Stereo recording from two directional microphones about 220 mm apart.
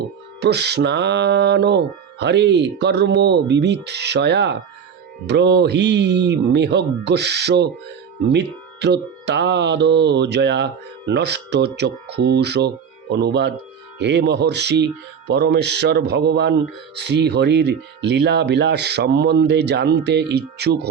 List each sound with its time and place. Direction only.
0.3 s speech: 50° right (ahead or behind)